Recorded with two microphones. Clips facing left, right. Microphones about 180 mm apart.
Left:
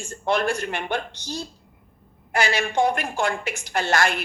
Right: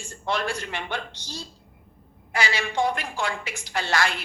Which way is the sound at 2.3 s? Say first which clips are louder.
Left 4 dB; 50° left (ahead or behind).